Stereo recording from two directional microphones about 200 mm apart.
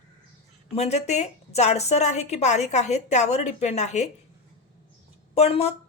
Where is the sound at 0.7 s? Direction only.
35° left (ahead or behind).